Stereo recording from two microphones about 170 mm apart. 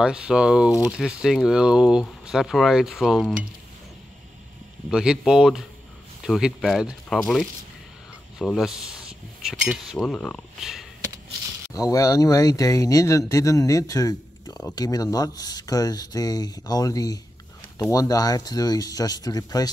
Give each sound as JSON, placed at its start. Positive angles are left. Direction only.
{"t": 0.0, "sound": "speech", "side_deg": -5}
{"t": 4.8, "sound": "speech", "side_deg": -5}
{"t": 8.4, "sound": "speech", "side_deg": 0}
{"t": 11.7, "sound": "speech", "side_deg": 20}